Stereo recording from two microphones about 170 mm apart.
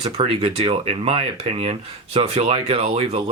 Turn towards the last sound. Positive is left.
turn(degrees=-35)  # may be behind; listen again after turning